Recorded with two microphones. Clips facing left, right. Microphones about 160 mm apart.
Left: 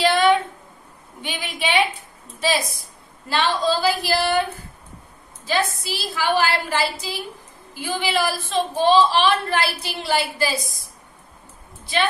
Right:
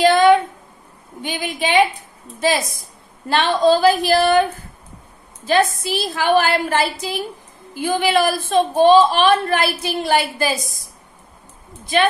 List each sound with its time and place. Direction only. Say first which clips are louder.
0.0 s a sound: right 5 dB; 45° right (ahead or behind)
1.2 s a woman's voice: right 4 dB; 45° right (ahead or behind)
3.3 s a woman's voice: right 6 dB; 50° right (ahead or behind)
5.5 s a woman's voice: right 6 dB; 50° right (ahead or behind)